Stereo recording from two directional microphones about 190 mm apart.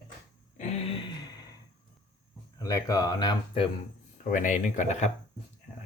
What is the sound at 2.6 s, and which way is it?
A man's voice, 15° left (ahead or behind).